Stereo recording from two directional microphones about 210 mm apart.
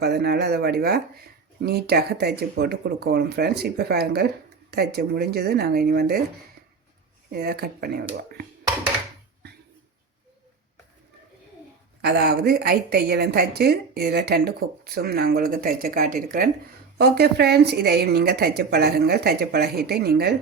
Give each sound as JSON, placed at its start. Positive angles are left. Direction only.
{"t": 0.0, "sound": "a woman's voice", "side_deg": -50}
{"t": 7.3, "sound": "a woman's voice", "side_deg": -45}
{"t": 12.0, "sound": "a woman's voice", "side_deg": -50}